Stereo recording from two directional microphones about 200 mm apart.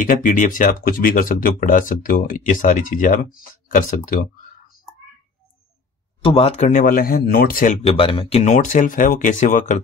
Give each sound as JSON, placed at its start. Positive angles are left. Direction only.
{"t": 0.0, "sound": "speech", "side_deg": 40}
{"t": 6.2, "sound": "speech", "side_deg": 30}